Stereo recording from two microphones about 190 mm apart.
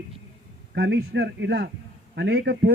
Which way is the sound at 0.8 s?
70° right (ahead or behind).